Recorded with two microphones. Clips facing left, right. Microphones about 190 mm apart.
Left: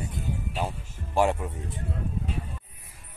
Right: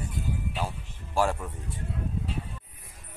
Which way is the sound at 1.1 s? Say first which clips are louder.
Left 3 dB; 15° left (ahead or behind).